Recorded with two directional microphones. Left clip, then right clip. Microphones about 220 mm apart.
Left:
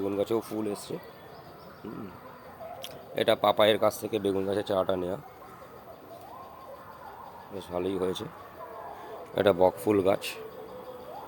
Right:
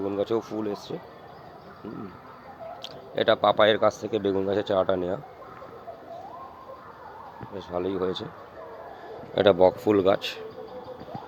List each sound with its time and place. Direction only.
0.0 s speech: 15° left (ahead or behind)
2.8 s speech: 10° left (ahead or behind)
7.7 s speech: 10° left (ahead or behind)
9.3 s speech: 10° left (ahead or behind)